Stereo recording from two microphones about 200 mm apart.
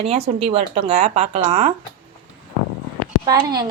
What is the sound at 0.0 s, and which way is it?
Speech, 30° right (ahead or behind).